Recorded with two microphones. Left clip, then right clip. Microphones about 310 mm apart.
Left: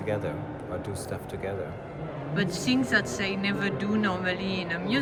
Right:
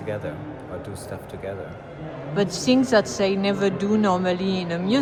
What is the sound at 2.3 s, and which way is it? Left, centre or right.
A woman's voice, centre.